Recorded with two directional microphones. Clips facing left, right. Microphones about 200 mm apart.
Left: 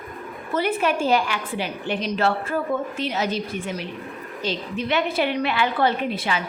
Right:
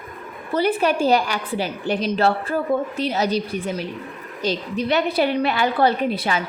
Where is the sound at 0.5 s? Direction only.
35° right (ahead or behind).